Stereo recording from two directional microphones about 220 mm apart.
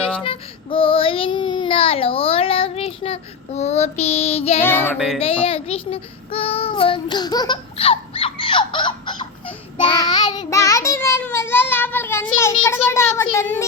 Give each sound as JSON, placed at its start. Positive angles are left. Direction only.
{"t": 0.3, "sound": "child singing", "side_deg": 25}
{"t": 4.6, "sound": "child singing", "side_deg": 10}
{"t": 4.9, "sound": "music", "side_deg": 0}
{"t": 5.2, "sound": "child singing", "side_deg": 25}
{"t": 12.9, "sound": "a child's voice", "side_deg": 10}
{"t": 13.4, "sound": "child singing", "side_deg": 10}